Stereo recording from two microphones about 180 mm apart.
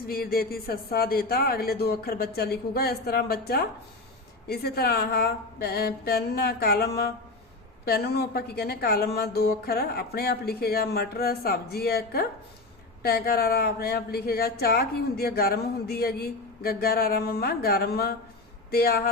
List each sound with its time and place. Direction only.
0.0 s speech: 55° left (ahead or behind)